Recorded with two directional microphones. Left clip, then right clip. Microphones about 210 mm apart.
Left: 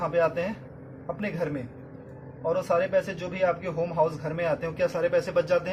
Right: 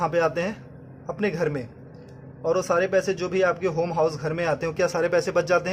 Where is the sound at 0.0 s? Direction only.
50° right (ahead or behind).